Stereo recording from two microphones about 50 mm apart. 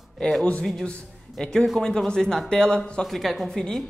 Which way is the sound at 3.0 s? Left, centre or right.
Centre.